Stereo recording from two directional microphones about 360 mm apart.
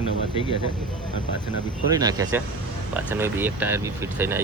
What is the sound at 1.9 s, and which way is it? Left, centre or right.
Speech, centre.